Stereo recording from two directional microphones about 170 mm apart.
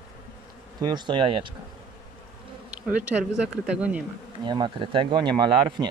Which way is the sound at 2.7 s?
5° right (ahead or behind).